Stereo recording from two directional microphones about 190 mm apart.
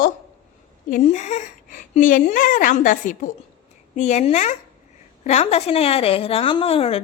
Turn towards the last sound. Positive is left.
turn(degrees=30)  # may be behind; listen again after turning